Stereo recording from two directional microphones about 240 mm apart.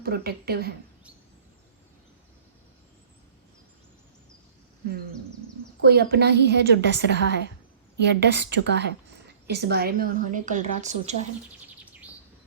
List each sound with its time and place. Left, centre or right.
0.0 s a woman's voice: right
5.8 s a woman's voice: right